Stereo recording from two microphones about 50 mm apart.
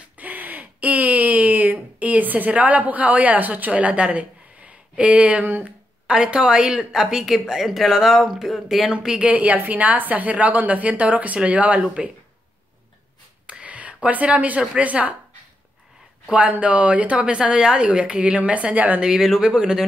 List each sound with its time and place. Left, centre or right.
0.2 s a sound: right
5.6 s a woman's voice: centre
9.2 s a woman's voice: right
13.5 s whispering: right
14.0 s a woman's voice: right
16.3 s a woman's voice: right
18.9 s a woman's voice: centre